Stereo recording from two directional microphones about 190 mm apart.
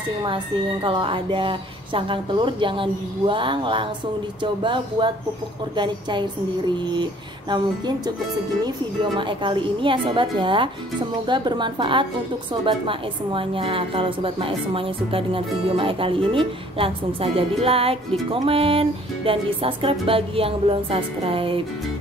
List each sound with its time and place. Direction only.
0.8 s a woman's voice: 25° right (ahead or behind)